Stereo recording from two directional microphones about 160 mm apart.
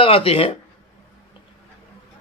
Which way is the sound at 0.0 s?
35° left (ahead or behind).